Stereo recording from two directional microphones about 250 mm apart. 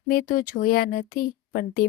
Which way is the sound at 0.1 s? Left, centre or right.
Left.